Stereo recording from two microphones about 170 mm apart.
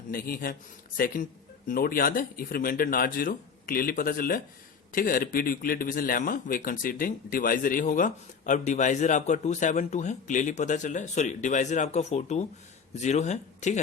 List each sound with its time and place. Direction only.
0.1 s a man's voice: 60° left (ahead or behind)